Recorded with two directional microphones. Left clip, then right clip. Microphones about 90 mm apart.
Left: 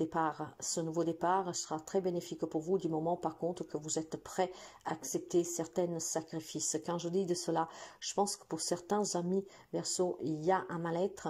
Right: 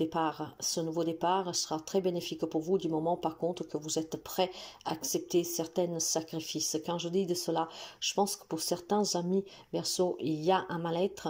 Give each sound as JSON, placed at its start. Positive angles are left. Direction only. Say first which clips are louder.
{"t": 0.0, "sound": "speech", "louder": "right 2 dB", "side_deg": -5}